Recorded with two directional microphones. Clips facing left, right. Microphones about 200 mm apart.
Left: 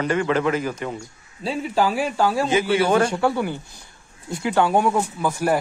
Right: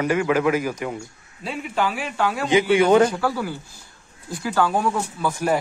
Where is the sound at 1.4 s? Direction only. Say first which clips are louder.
Left 3 dB; 35° left (ahead or behind).